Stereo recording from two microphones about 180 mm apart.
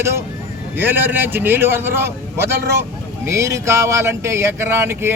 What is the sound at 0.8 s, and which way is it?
A man's voice, 10° right (ahead or behind).